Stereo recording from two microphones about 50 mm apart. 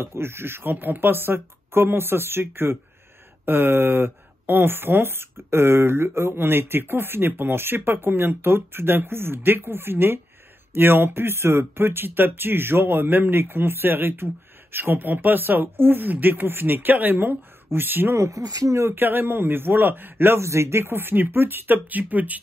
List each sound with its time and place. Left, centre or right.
0.0 s speech: right
18.1 s speech: right
18.9 s speech: right
20.3 s speech: right